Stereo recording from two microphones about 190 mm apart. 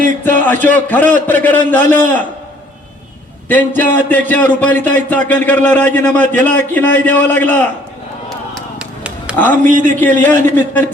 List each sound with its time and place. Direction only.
0.3 s a man's voice: 10° left (ahead or behind)
3.5 s a man's voice: 10° left (ahead or behind)
8.3 s a sound: centre (ahead or behind)
9.5 s speech: 40° right (ahead or behind)
10.0 s a man's voice: 10° left (ahead or behind)